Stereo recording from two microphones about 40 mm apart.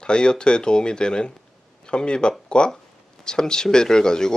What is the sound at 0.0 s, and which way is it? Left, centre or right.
Speech, left.